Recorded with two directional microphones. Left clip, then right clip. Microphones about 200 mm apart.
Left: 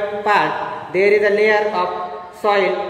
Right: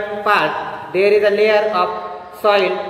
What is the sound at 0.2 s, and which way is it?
A man's voice, 20° left (ahead or behind).